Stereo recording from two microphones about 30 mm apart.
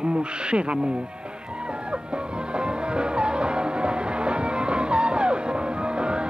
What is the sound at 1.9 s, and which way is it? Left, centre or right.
Music, right.